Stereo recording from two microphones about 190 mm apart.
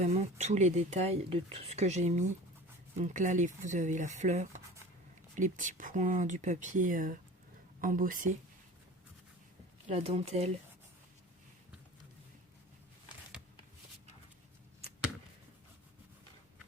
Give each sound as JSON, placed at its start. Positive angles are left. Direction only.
{"t": 0.0, "sound": "speech", "side_deg": -35}
{"t": 9.9, "sound": "speech", "side_deg": -30}